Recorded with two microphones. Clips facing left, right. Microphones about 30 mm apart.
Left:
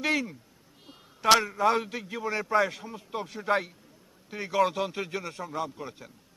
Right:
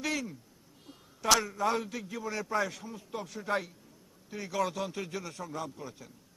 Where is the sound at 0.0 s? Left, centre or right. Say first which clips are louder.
Left 6 dB; left.